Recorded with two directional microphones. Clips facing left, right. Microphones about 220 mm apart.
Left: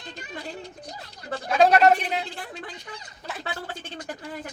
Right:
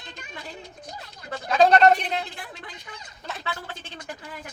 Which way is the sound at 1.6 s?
5° left (ahead or behind).